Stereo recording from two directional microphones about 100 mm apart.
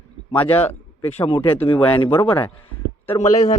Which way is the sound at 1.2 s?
60° left (ahead or behind).